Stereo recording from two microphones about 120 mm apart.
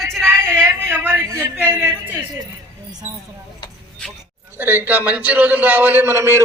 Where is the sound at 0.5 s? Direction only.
15° right (ahead or behind).